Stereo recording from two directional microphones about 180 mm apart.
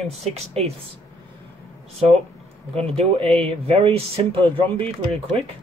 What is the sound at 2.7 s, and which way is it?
Speech, 35° right (ahead or behind).